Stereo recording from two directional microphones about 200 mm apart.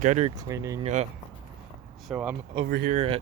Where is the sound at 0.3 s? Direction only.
15° right (ahead or behind).